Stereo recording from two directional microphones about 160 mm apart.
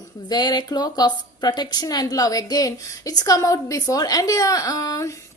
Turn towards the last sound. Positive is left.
turn(degrees=20)  # may be behind; listen again after turning